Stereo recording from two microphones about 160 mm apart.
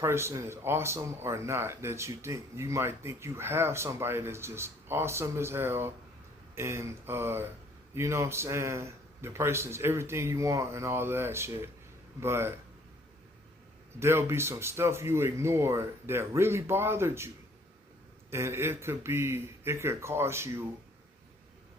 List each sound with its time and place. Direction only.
0.0 s speech: 15° right (ahead or behind)
14.0 s speech: 15° right (ahead or behind)